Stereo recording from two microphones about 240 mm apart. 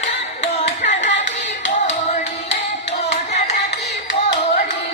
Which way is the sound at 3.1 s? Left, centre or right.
Left.